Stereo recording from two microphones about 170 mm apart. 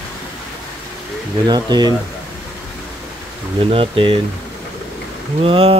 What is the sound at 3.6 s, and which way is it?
Speech, 35° right (ahead or behind).